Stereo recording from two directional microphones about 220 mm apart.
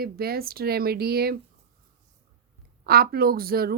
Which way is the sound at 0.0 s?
45° right (ahead or behind).